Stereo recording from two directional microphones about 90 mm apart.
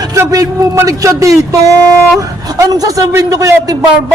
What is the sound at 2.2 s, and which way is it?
A man's voice, 40° right (ahead or behind).